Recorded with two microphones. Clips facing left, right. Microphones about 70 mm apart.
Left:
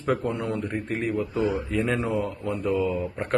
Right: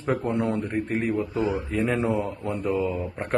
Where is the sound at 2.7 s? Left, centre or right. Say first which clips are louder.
Left 1 dB; right.